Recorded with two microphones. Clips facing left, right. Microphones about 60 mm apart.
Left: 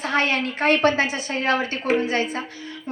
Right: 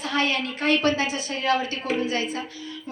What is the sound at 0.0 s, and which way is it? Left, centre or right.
A woman's voice, left.